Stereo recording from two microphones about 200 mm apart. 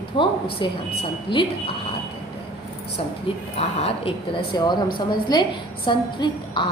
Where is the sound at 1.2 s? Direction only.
25° left (ahead or behind).